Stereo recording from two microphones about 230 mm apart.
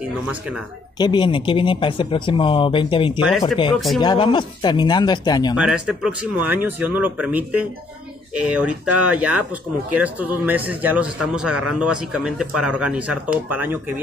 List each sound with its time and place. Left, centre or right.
0.9 s speech: centre
3.2 s speech: centre
4.0 s speech: centre
5.6 s speech: centre